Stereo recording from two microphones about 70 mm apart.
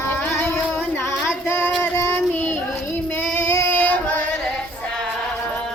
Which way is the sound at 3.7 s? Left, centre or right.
Left.